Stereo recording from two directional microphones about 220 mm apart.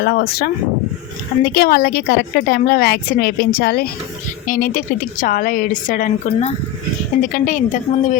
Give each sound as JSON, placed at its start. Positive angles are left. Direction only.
{"t": 0.0, "sound": "a woman's voice", "side_deg": 45}
{"t": 1.5, "sound": "a woman's voice", "side_deg": 45}